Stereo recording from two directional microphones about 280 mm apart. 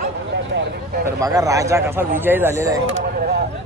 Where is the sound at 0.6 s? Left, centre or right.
Right.